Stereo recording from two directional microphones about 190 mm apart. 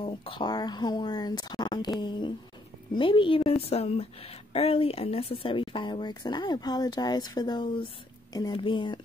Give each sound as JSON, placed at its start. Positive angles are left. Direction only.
{"t": 0.0, "sound": "a woman's voice", "side_deg": 30}